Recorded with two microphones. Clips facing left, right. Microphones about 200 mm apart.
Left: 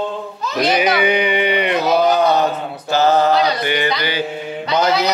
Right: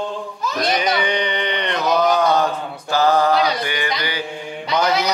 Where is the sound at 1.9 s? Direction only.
20° left (ahead or behind).